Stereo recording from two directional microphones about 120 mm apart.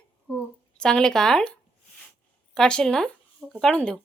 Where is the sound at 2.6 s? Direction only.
5° left (ahead or behind).